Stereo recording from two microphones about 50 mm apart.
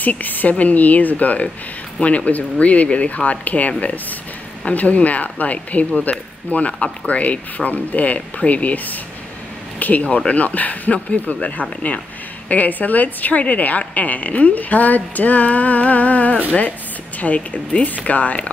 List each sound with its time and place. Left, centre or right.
0.0 s a woman's voice: left
9.8 s a sound: left
10.0 s speech: left
12.4 s a woman's voice: left